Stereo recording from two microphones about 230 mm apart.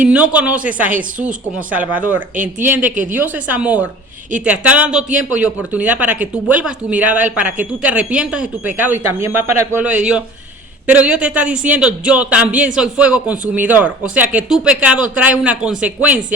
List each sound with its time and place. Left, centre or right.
0.1 s a man's voice: centre
2.3 s speech: right
2.6 s a man's voice: centre